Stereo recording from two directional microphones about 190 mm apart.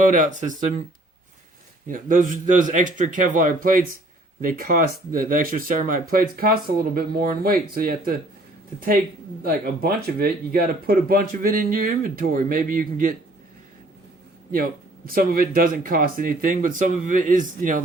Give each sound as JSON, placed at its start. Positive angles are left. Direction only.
{"t": 0.1, "sound": "speech", "side_deg": -40}
{"t": 1.9, "sound": "speech", "side_deg": -45}
{"t": 9.4, "sound": "speech", "side_deg": -50}
{"t": 14.5, "sound": "speech", "side_deg": -50}